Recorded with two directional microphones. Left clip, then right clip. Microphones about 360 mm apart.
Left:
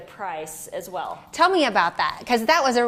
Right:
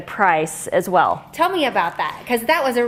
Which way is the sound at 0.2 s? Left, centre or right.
Right.